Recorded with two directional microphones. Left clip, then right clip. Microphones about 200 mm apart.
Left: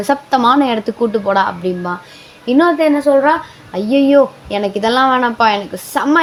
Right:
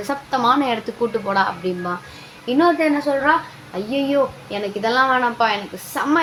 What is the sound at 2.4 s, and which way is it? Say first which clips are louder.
Speech: left 5 dB; 40° left (ahead or behind).